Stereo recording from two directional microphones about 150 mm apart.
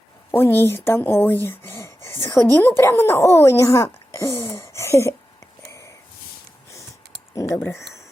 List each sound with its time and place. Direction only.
0.3 s speech: 15° left (ahead or behind)
4.7 s a sound: 20° left (ahead or behind)
7.3 s speech: 20° left (ahead or behind)